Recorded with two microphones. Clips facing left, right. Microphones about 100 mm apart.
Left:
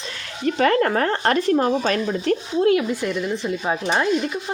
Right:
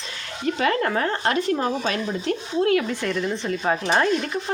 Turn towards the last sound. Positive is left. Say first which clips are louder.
# even
turn(degrees=10)  # may be behind; listen again after turning